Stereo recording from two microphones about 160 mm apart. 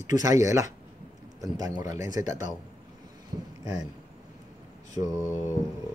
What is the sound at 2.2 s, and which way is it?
Mantra, 15° right (ahead or behind).